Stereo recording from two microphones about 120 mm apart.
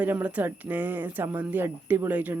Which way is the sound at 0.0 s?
15° right (ahead or behind).